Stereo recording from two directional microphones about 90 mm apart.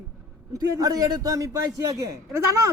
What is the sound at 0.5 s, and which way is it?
A man's voice, 45° right (ahead or behind).